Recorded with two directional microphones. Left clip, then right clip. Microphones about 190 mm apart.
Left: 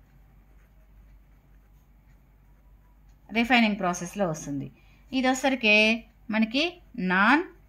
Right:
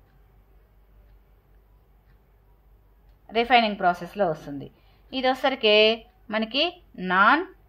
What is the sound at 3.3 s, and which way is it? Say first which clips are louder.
A woman's voice: right 3 dB; 35° left (ahead or behind).